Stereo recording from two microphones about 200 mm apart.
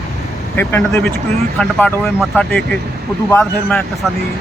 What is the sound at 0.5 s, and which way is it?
Speech, 10° left (ahead or behind).